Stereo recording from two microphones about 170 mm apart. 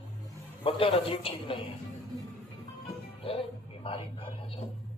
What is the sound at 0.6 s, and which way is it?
Speech, 35° left (ahead or behind).